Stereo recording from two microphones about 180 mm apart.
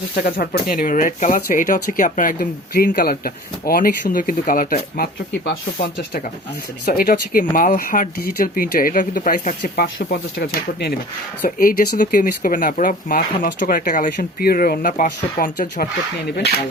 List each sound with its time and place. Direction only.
0.2 s speech: 55° left (ahead or behind)
6.8 s speech: 55° left (ahead or behind)